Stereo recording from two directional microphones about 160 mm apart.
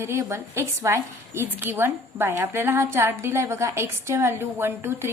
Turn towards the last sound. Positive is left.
turn(degrees=-15)  # may be behind; listen again after turning